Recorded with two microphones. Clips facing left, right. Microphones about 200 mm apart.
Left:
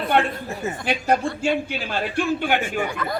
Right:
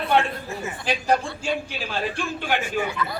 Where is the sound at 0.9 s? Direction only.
60° left (ahead or behind).